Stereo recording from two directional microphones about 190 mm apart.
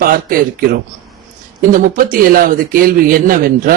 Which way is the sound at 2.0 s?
50° right (ahead or behind).